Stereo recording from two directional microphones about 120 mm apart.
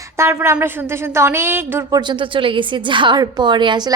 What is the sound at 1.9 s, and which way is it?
A woman's voice, 40° right (ahead or behind).